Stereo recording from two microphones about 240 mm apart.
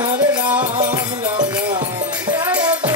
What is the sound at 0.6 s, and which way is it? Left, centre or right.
Music, right.